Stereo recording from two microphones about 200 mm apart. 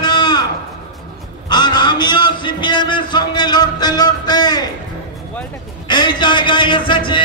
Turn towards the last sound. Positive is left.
turn(degrees=25)  # may be behind; listen again after turning